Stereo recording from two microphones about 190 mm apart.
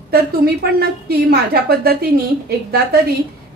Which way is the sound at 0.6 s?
55° right (ahead or behind).